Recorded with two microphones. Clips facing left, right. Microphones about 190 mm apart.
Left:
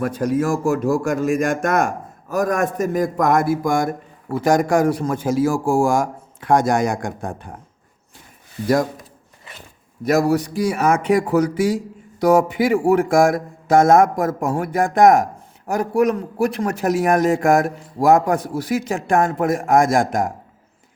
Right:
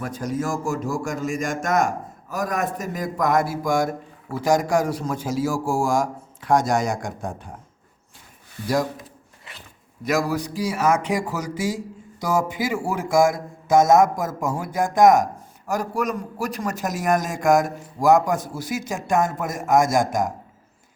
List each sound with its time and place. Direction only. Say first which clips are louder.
0.0 s a man's voice: left 7 dB; 60° left (ahead or behind)
2.3 s a man's voice: left 6 dB; 50° left (ahead or behind)
8.6 s a man's voice: left 5 dB; 55° left (ahead or behind)
10.1 s a man's voice: left 6 dB; 60° left (ahead or behind)